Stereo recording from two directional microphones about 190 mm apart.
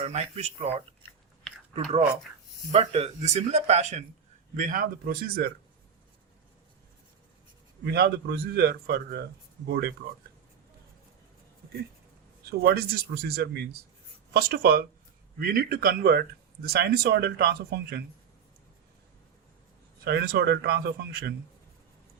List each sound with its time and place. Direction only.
0.0 s speech: 35° right (ahead or behind); by 5.5 s 50° right (ahead or behind)
7.9 s a man's voice: 55° right (ahead or behind)
12.5 s a man's voice: 55° right (ahead or behind)
20.1 s a man's voice: 60° right (ahead or behind)